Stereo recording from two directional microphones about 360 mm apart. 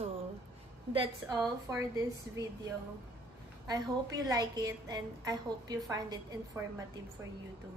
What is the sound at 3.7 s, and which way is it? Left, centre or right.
A woman's voice, centre.